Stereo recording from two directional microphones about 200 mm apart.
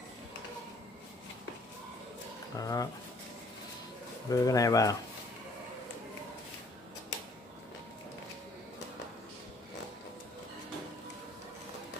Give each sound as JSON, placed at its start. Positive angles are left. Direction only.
{"t": 2.5, "sound": "speech", "side_deg": 15}
{"t": 4.3, "sound": "speech", "side_deg": 15}